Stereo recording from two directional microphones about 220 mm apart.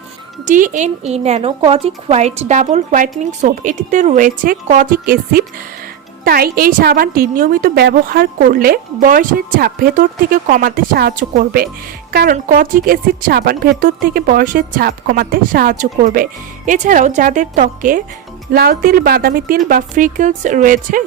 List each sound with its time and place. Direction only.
0.4 s a woman's voice: 35° right (ahead or behind)